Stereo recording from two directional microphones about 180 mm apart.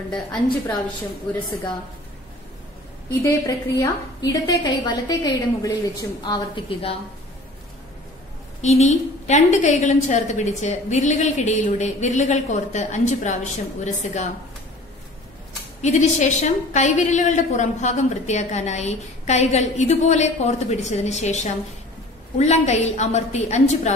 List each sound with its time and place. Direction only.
0.1 s a woman's voice: 5° left (ahead or behind)
3.1 s a woman's voice: 15° left (ahead or behind)
8.5 s a woman's voice: 40° left (ahead or behind)
15.8 s a woman's voice: 40° left (ahead or behind)